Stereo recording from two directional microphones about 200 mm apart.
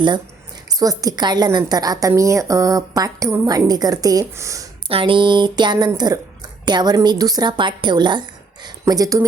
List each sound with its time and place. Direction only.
0.8 s a woman's voice: 20° right (ahead or behind)
4.9 s a woman's voice: 25° right (ahead or behind)